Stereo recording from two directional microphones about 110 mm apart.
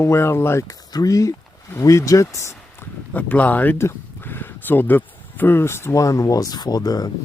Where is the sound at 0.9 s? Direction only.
35° left (ahead or behind).